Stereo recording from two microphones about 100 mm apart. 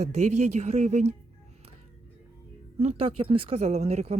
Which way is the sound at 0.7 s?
90° right.